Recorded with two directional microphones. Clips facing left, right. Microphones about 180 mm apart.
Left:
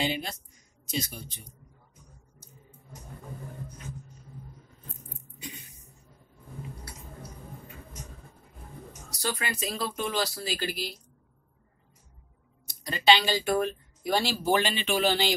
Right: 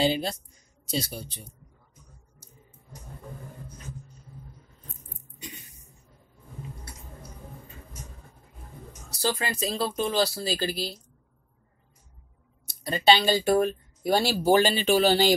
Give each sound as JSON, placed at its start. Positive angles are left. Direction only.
{"t": 0.0, "sound": "speech", "side_deg": -35}
{"t": 9.2, "sound": "speech", "side_deg": -30}
{"t": 12.8, "sound": "speech", "side_deg": -35}